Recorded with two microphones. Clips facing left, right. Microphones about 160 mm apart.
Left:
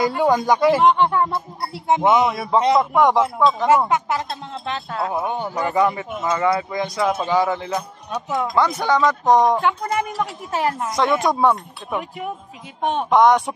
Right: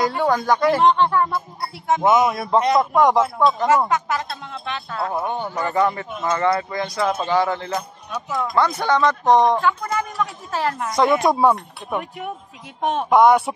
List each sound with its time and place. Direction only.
0.1 s speech: 15° left (ahead or behind)
2.3 s speech: 5° left (ahead or behind)
3.9 s speech: 25° left (ahead or behind)
5.1 s speech: 10° left (ahead or behind)